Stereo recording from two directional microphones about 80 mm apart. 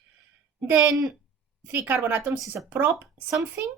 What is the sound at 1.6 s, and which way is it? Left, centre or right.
Speech, right.